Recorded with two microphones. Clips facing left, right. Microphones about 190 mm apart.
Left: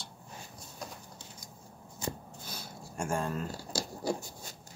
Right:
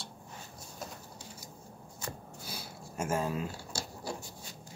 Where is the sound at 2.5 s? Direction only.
5° right (ahead or behind).